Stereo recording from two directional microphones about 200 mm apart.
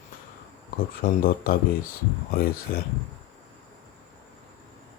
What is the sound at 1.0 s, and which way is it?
Speech, 45° left (ahead or behind).